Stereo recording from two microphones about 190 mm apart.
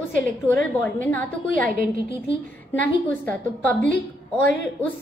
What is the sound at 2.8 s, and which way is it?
A woman's voice, 10° left (ahead or behind).